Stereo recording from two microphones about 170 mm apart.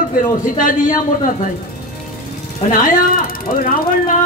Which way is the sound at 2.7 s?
50° left (ahead or behind).